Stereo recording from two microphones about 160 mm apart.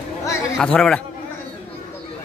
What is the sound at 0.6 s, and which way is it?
Speech, 5° left (ahead or behind).